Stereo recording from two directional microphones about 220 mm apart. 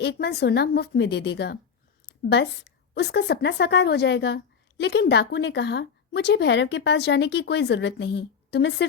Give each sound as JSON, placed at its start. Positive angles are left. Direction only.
{"t": 0.0, "sound": "a woman's voice", "side_deg": 50}